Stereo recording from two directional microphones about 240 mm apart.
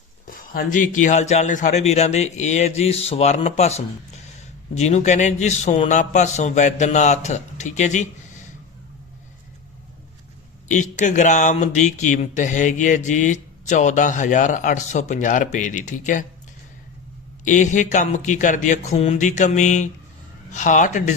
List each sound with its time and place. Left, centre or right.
0.3 s speech: left
10.7 s speech: left
17.4 s speech: left